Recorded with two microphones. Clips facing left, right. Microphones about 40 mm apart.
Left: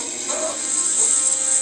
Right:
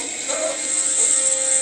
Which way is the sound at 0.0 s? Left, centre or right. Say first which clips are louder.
Right 2 dB; right.